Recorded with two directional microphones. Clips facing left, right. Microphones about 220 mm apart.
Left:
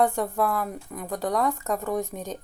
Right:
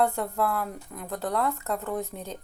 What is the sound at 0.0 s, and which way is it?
A woman's voice, 15° left (ahead or behind).